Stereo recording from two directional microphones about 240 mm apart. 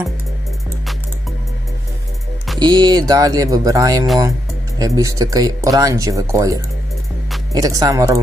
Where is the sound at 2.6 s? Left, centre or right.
Centre.